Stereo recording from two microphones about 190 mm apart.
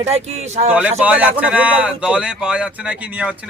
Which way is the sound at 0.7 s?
10° right (ahead or behind).